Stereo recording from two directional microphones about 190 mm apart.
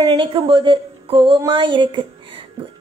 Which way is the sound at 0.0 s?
25° right (ahead or behind).